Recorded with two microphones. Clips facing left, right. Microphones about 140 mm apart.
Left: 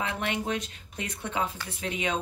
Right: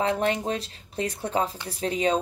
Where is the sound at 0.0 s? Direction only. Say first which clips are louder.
Right 6 dB; 35° right (ahead or behind).